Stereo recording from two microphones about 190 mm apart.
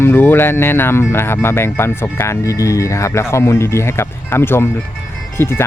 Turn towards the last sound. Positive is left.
turn(degrees=10)  # may be behind; listen again after turning